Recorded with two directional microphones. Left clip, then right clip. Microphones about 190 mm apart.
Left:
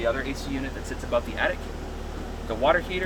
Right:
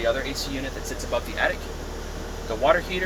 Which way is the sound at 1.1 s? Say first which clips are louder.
Even; 20° left (ahead or behind).